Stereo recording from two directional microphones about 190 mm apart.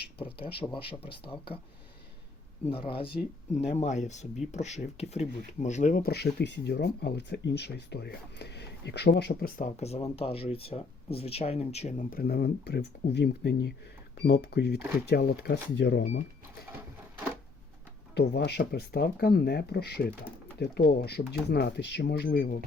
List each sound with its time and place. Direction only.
0.4 s speech: 25° left (ahead or behind)
2.6 s speech: 30° left (ahead or behind); by 16.0 s 65° left (ahead or behind)
18.1 s speech: 60° left (ahead or behind)